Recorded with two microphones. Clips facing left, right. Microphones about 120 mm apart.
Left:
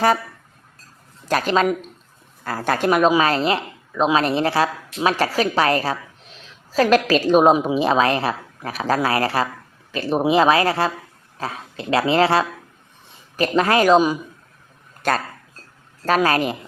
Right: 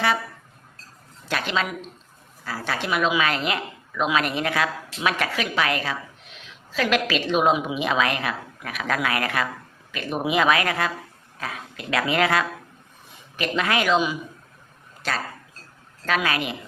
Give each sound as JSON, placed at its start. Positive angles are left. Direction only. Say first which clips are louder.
{"t": 1.2, "sound": "a woman's voice", "louder": "left 7 dB", "side_deg": 40}